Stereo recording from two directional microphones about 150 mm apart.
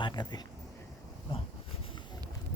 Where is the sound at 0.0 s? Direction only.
30° left (ahead or behind).